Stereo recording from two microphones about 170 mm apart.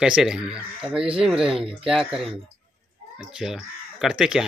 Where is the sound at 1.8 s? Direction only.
5° right (ahead or behind).